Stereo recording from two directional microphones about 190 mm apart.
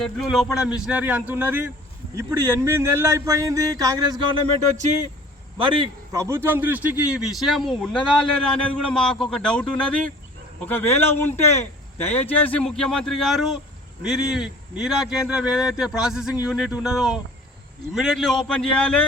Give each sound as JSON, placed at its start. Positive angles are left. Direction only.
{"t": 0.0, "sound": "speech", "side_deg": 0}
{"t": 5.5, "sound": "a man's voice", "side_deg": -25}
{"t": 6.2, "sound": "a man's voice", "side_deg": -15}